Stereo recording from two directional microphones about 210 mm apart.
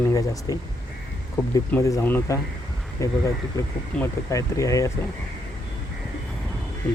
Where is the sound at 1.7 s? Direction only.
10° left (ahead or behind).